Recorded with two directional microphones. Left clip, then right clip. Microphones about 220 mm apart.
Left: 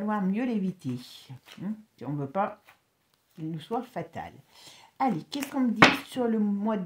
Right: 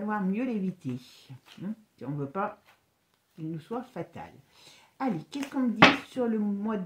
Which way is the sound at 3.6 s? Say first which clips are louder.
Left 6 dB; 40° left (ahead or behind).